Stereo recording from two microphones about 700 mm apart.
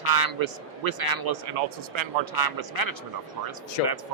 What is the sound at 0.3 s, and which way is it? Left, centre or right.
Speech, right.